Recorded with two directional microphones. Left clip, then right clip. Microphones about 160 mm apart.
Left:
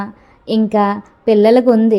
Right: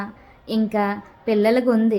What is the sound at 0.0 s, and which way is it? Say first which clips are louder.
A woman's voice: left 6 dB; 25° left (ahead or behind).